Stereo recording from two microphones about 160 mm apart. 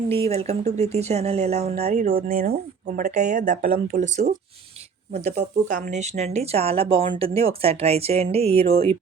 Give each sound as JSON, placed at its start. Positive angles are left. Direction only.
{"t": 0.2, "sound": "speech", "side_deg": -40}